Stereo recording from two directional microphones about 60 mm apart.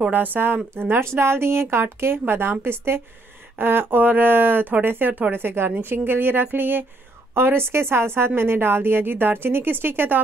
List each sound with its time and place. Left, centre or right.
0.1 s a woman's voice: right